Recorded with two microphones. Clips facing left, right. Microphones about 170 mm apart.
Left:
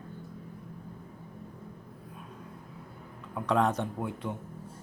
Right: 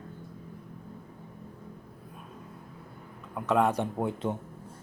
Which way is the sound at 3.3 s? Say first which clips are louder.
Right 2 dB; 5° right (ahead or behind).